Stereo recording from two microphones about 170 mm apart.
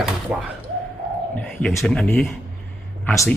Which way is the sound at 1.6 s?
5° left (ahead or behind).